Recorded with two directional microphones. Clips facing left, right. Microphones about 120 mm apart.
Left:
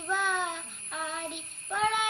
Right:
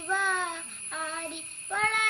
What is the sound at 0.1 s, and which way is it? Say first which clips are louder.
Child singing: even; 5° left (ahead or behind).